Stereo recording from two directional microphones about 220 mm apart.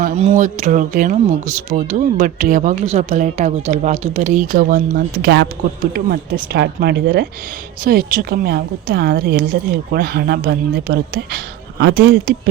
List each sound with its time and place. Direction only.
0.0 s a woman's voice: 30° right (ahead or behind); by 12.3 s 45° right (ahead or behind)